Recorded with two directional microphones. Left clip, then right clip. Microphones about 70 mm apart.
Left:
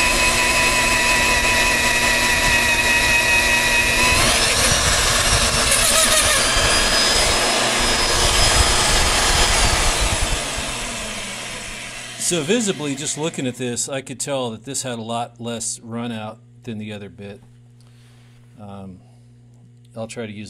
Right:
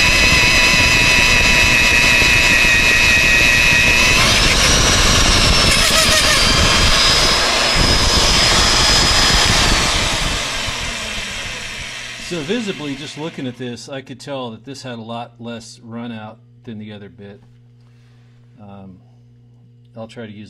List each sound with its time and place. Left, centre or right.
0.3 s a sound: centre
0.7 s a sound: centre
1.8 s jet engine: centre
3.2 s vehicle: centre
13.6 s speech: left
14.9 s speech: left
15.5 s speech: left
16.6 s speech: left
18.6 s speech: left
20.2 s speech: left